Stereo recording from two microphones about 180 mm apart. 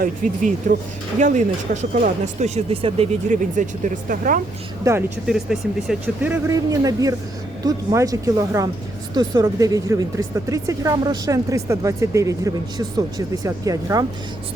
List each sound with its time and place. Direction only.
0.0 s speech: 50° right (ahead or behind)
4.8 s speech: 15° right (ahead or behind)
5.2 s speech: 5° right (ahead or behind); by 14.0 s 20° right (ahead or behind)